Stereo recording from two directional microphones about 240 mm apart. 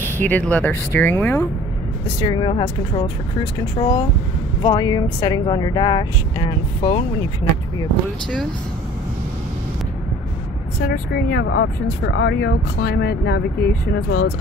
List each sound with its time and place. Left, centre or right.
0.0 s speech: centre
2.1 s speech: centre
10.8 s speech: left